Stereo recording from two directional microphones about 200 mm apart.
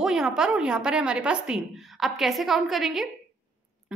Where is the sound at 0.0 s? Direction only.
Centre (ahead or behind).